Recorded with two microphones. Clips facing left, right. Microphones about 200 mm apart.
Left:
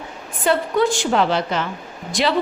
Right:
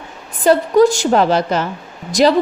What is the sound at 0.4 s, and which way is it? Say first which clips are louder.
A woman's voice: right 7 dB; 40° right (ahead or behind).